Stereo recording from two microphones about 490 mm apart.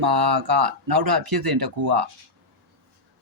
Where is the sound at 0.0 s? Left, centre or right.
Right.